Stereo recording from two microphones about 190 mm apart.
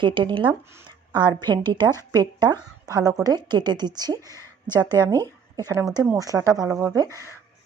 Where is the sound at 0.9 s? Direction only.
20° right (ahead or behind).